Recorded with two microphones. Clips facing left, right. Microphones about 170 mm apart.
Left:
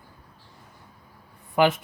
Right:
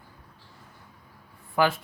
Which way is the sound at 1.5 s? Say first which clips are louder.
Left 3 dB; 20° left (ahead or behind).